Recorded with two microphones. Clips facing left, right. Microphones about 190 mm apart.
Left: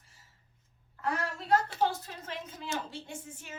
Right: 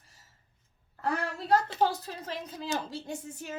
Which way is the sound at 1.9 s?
35° right (ahead or behind).